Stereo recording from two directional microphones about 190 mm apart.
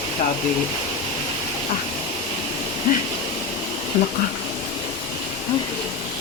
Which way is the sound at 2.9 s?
45° left (ahead or behind).